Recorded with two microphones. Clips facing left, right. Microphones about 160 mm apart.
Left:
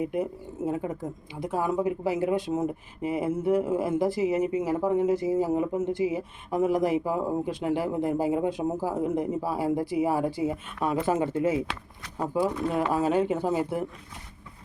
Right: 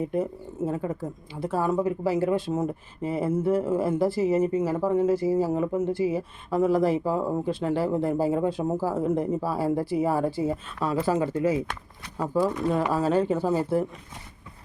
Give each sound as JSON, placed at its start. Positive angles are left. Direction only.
{"t": 0.0, "sound": "speech", "side_deg": 15}